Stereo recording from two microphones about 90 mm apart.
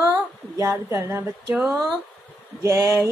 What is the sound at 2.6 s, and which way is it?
Speech, 35° right (ahead or behind).